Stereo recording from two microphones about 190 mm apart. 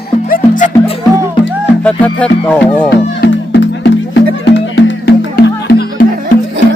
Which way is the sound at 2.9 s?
70° left (ahead or behind).